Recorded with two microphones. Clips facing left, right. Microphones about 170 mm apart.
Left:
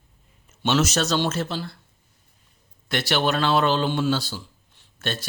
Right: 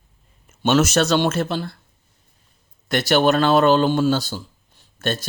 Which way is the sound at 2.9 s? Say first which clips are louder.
Right 6 dB; 45° right (ahead or behind).